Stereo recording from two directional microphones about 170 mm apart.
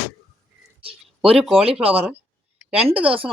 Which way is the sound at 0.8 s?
35° right (ahead or behind).